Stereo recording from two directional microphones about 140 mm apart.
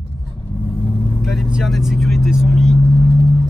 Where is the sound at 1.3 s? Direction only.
Centre (ahead or behind).